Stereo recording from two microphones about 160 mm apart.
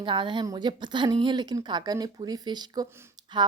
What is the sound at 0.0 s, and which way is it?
Speech, 30° right (ahead or behind).